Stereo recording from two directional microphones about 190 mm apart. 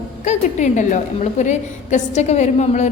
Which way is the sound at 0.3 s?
40° left (ahead or behind).